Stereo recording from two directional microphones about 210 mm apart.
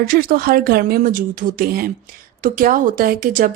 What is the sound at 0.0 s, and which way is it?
A woman's voice, 45° right (ahead or behind).